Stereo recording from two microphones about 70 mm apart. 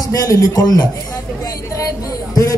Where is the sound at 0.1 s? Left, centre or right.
Left.